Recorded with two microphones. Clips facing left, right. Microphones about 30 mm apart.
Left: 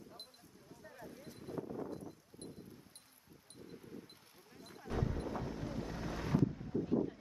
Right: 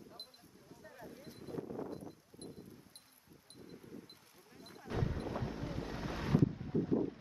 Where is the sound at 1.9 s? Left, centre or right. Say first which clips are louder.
Even; centre.